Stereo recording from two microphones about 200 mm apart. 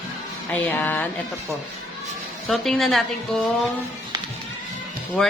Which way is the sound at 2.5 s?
Centre (ahead or behind).